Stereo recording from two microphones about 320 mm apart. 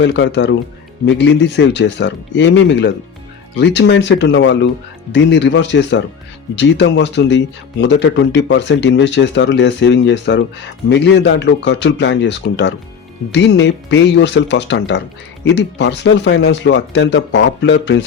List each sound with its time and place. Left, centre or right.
0.0 s speech: left